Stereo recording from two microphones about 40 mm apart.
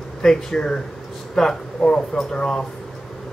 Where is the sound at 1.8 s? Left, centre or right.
Left.